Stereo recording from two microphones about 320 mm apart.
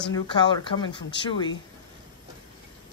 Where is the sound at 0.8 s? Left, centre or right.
Centre.